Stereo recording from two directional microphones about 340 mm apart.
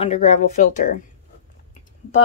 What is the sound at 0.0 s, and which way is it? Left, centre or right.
Speech, centre.